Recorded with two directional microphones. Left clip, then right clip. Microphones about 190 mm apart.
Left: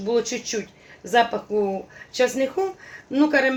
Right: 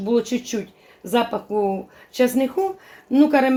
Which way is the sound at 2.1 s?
35° right (ahead or behind).